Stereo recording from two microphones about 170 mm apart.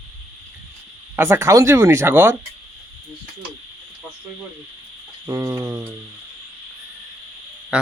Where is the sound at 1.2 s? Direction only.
15° right (ahead or behind).